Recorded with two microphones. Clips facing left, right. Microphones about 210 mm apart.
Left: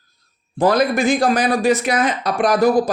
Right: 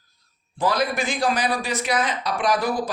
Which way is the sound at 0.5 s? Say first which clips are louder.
Left 7 dB; 50° left (ahead or behind).